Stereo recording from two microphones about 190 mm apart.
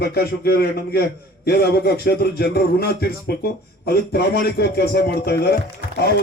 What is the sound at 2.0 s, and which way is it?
A man's voice, 55° left (ahead or behind).